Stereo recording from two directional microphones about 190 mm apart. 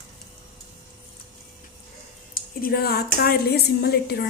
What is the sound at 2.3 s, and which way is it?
Speech, 50° left (ahead or behind).